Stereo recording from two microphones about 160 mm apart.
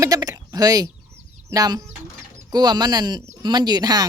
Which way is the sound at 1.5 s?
25° right (ahead or behind).